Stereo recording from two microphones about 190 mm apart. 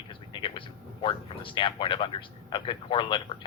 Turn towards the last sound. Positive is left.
turn(degrees=25)  # may be behind; listen again after turning